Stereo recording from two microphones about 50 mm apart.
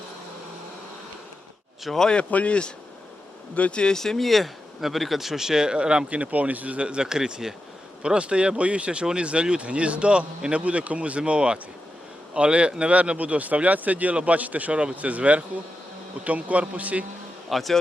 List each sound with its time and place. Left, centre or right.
1.8 s a man's voice: centre
2.3 s speech: left; by 17.1 s right
17.5 s a man's voice: centre